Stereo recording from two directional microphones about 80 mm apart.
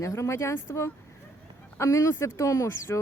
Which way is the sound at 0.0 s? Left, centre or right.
Left.